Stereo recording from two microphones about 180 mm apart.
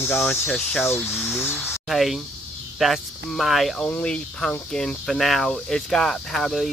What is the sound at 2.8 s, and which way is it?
Speech, centre (ahead or behind).